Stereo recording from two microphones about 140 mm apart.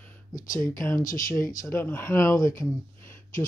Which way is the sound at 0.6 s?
20° left (ahead or behind).